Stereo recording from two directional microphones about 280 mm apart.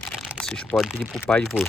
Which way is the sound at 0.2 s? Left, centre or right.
Centre.